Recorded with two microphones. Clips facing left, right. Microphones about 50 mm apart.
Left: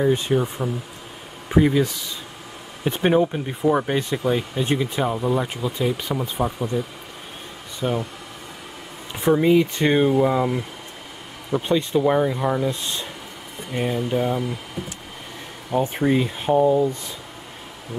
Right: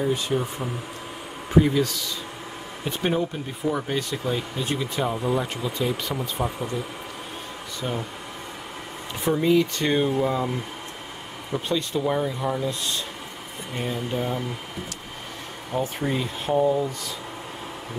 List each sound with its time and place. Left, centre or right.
0.0 s speech: left
7.8 s speech: centre
9.2 s speech: left
14.1 s speech: centre
15.7 s speech: centre